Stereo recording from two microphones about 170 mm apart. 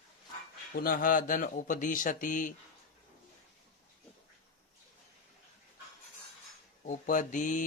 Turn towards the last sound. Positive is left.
turn(degrees=50)  # may be behind; listen again after turning